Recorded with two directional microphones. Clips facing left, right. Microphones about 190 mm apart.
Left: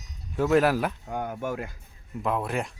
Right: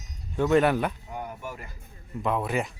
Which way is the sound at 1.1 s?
90° left.